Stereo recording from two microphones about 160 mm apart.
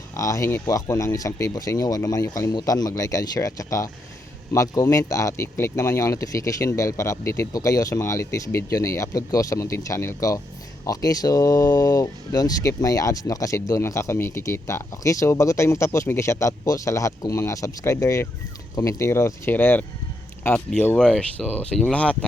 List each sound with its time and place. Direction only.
0.2 s speech: 20° left (ahead or behind)